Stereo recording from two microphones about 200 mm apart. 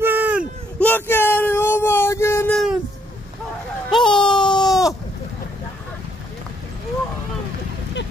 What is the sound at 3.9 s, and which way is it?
Baby cry, centre (ahead or behind).